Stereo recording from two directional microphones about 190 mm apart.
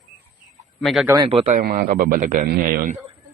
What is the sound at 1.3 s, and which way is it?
Speech, 30° right (ahead or behind).